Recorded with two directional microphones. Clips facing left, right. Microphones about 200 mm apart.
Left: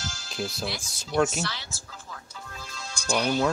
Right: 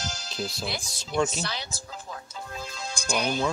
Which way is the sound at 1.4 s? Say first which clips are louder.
Even; 15° right (ahead or behind).